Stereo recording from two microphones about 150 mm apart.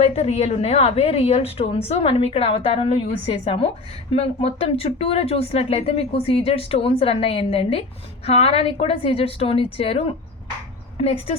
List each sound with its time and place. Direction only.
0.0 s speech: 45° left (ahead or behind)